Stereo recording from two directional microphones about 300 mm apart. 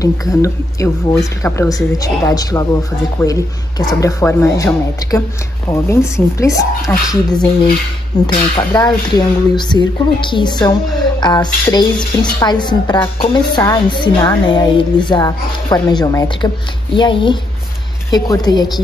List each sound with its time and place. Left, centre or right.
0.0 s a woman's voice: centre
8.3 s a woman's voice: centre